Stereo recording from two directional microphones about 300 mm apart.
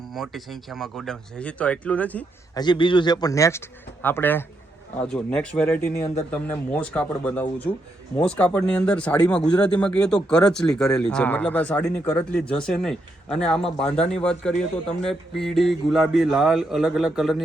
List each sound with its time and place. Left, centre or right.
0.1 s speech: centre